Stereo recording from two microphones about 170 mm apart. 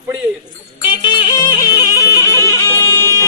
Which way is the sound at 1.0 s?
25° left (ahead or behind).